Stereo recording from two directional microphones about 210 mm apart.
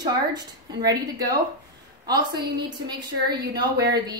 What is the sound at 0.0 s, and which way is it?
A woman's voice, 20° right (ahead or behind).